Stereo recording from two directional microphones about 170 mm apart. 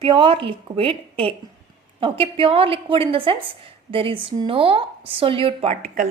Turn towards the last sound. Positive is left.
turn(degrees=-35)  # may be behind; listen again after turning